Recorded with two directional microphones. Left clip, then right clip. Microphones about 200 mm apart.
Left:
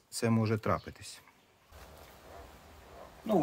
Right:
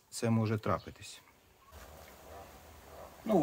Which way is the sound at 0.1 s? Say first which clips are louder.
Left 2 dB; 25° left (ahead or behind).